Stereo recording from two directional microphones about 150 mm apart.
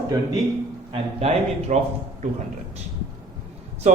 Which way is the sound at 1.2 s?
45° right (ahead or behind).